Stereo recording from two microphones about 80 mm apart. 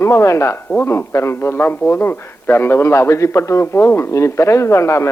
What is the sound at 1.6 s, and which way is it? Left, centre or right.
A man's voice, left.